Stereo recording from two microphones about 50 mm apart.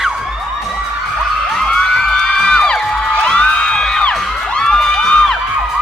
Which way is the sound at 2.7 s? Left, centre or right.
Left.